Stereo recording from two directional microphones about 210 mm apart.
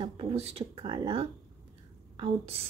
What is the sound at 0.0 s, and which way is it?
Speech, 30° right (ahead or behind).